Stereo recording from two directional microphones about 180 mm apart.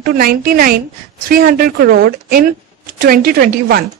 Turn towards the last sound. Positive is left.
turn(degrees=-60)  # may be behind; listen again after turning